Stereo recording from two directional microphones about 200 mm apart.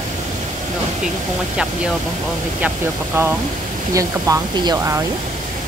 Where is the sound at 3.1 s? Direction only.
10° right (ahead or behind).